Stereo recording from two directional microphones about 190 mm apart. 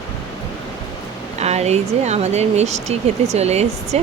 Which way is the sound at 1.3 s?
35° right (ahead or behind).